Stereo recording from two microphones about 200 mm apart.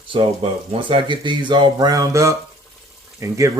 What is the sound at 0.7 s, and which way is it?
Speech, 25° right (ahead or behind).